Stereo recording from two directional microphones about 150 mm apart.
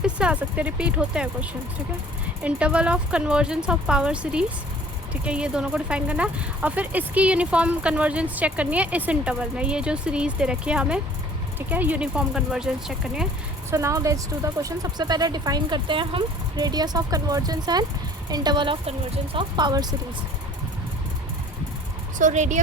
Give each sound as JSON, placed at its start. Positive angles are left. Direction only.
{"t": 0.0, "sound": "speech", "side_deg": -5}
{"t": 13.7, "sound": "speech", "side_deg": -20}
{"t": 22.2, "sound": "speech", "side_deg": -55}